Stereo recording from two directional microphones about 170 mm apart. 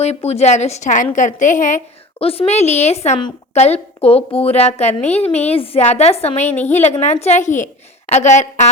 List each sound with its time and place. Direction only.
0.0 s a woman's voice: 40° left (ahead or behind)
2.1 s a woman's voice: 35° left (ahead or behind)
6.5 s a woman's voice: 10° left (ahead or behind)
7.0 s a woman's voice: 40° left (ahead or behind)